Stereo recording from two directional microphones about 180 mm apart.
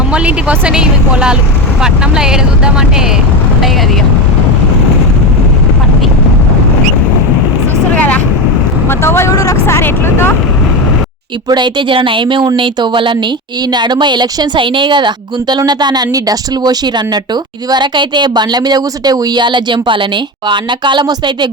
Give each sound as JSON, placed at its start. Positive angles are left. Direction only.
{"t": 0.1, "sound": "speech", "side_deg": -5}
{"t": 7.9, "sound": "vehicle", "side_deg": 10}
{"t": 8.9, "sound": "speech", "side_deg": 15}
{"t": 11.4, "sound": "a woman's voice", "side_deg": -25}